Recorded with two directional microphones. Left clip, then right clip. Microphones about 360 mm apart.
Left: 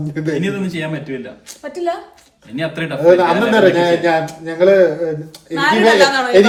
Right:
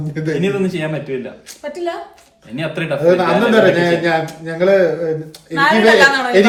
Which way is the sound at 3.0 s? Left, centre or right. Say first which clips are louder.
Left 2 dB; centre.